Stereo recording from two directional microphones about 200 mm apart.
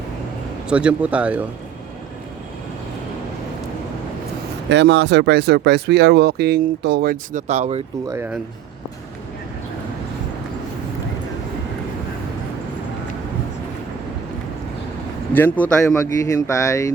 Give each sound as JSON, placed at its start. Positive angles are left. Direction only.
{"t": 0.7, "sound": "speech", "side_deg": -5}
{"t": 4.7, "sound": "speech", "side_deg": -60}
{"t": 7.4, "sound": "speech", "side_deg": -35}
{"t": 8.0, "sound": "speech", "side_deg": -15}
{"t": 15.3, "sound": "speech", "side_deg": 10}